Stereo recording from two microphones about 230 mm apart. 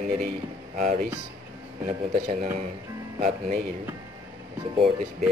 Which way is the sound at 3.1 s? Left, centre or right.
Right.